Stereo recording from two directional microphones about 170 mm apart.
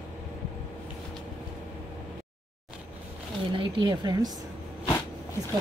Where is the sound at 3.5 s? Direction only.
30° right (ahead or behind).